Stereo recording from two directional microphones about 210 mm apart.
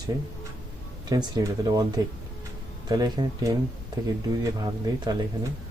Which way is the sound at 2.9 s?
20° right (ahead or behind).